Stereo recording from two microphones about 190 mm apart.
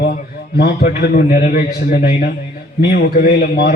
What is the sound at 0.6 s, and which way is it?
Speech, 55° left (ahead or behind).